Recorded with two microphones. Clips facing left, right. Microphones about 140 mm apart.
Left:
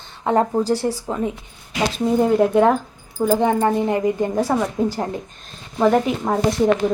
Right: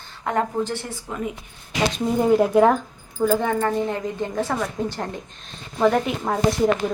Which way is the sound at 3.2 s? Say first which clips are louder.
Left 3 dB; 15° left (ahead or behind).